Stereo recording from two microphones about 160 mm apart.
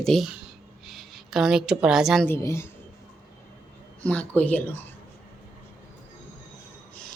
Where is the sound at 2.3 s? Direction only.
15° left (ahead or behind).